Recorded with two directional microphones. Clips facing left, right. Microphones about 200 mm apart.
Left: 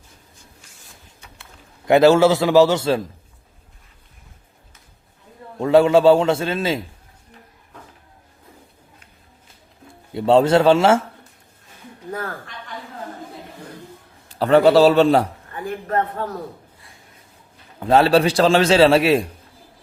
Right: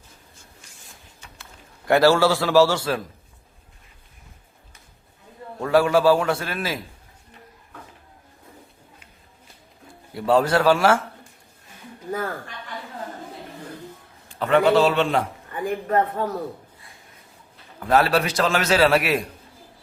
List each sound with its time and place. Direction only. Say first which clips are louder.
1.9 s a man's voice: left 4 dB; 20° left (ahead or behind)
5.5 s a man's voice: left 5 dB; 20° left (ahead or behind)
10.2 s a man's voice: left 5 dB; 25° left (ahead or behind)
14.3 s a man's voice: left 4 dB; 35° left (ahead or behind)
15.5 s a man's voice: right 1 dB; 10° right (ahead or behind)
17.7 s a man's voice: left 5 dB; 25° left (ahead or behind)